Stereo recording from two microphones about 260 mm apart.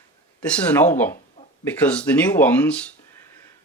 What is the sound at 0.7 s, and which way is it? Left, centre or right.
Speech, centre.